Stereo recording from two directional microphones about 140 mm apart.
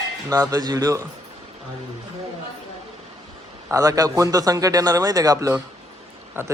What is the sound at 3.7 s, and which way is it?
A man's voice, 25° right (ahead or behind).